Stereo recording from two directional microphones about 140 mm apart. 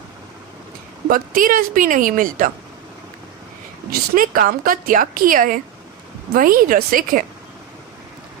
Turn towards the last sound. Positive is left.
turn(degrees=-85)